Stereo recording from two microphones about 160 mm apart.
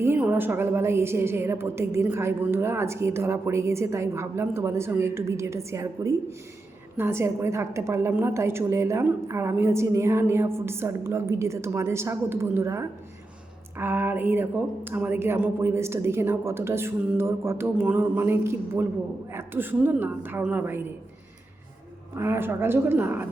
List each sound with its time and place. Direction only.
0.0 s a woman's voice: 15° right (ahead or behind)
22.2 s a woman's voice: 15° right (ahead or behind)